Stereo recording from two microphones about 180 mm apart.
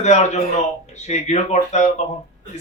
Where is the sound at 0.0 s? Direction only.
40° left (ahead or behind).